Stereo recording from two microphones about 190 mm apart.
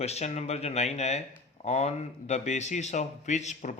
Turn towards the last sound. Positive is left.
turn(degrees=40)  # may be behind; listen again after turning